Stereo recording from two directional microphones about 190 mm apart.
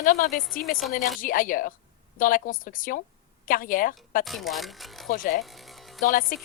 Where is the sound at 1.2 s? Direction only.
45° left (ahead or behind).